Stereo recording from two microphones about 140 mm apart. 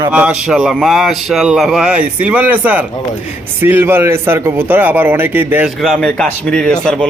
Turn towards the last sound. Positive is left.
turn(degrees=5)  # may be behind; listen again after turning